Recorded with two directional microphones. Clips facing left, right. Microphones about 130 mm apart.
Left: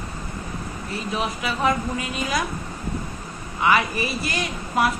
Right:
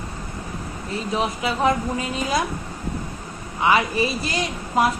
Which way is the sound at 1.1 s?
30° right (ahead or behind).